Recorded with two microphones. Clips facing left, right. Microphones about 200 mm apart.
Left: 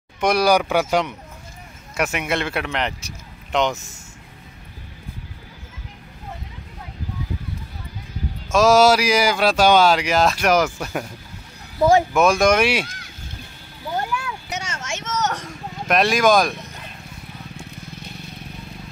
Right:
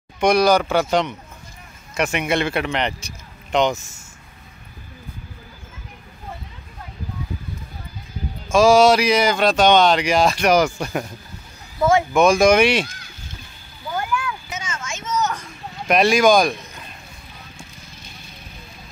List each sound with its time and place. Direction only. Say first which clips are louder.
0.2 s speech: right 2 dB; 5° left (ahead or behind)
8.5 s speech: right 1 dB; centre (ahead or behind)
12.1 s speech: right 2 dB; centre (ahead or behind)
14.5 s a sound: left 1 dB; 70° left (ahead or behind)
15.9 s speech: right 2 dB; centre (ahead or behind)